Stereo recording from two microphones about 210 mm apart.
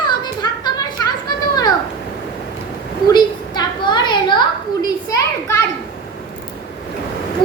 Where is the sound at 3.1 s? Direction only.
20° left (ahead or behind).